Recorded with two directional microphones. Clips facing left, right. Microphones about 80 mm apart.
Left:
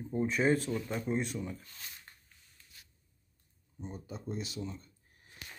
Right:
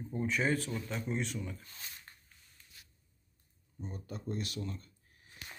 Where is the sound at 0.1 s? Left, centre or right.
Left.